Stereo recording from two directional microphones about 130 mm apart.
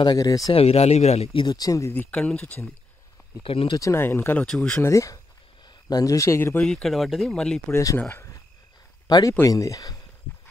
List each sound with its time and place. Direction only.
0.0 s speech: 30° left (ahead or behind)
0.5 s speech: 50° left (ahead or behind)
1.4 s speech: 30° left (ahead or behind); by 2.7 s 15° left (ahead or behind)
3.4 s speech: 45° left (ahead or behind)
3.7 s speech: 20° left (ahead or behind)
6.6 s speech: 5° left (ahead or behind)
7.7 s speech: 25° left (ahead or behind)
9.0 s speech: 30° left (ahead or behind)